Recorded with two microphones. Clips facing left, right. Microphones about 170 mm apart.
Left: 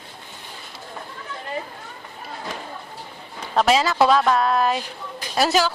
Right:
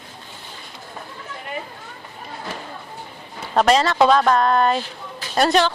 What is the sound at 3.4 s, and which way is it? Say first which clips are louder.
Speech: right 2 dB; 5° right (ahead or behind).